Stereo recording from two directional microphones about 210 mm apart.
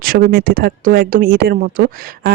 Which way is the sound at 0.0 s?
45° right (ahead or behind).